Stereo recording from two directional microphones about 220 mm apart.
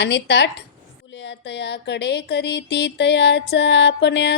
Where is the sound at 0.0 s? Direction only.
50° left (ahead or behind).